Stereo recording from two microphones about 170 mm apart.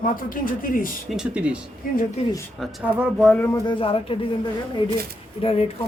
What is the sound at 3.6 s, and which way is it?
Speech, 30° left (ahead or behind).